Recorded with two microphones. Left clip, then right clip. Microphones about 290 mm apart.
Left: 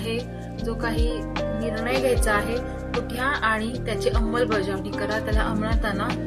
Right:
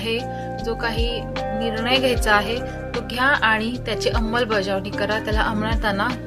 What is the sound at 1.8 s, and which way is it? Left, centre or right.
A woman's voice, right.